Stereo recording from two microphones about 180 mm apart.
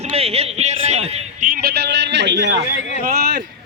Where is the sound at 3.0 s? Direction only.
60° right (ahead or behind).